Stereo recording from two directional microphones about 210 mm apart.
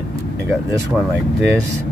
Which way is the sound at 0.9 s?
5° right (ahead or behind).